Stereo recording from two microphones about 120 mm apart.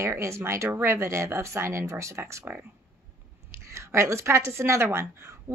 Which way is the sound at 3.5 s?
25° right (ahead or behind).